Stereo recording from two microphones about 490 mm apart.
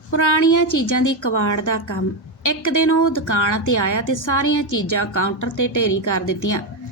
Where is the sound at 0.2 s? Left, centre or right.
Left.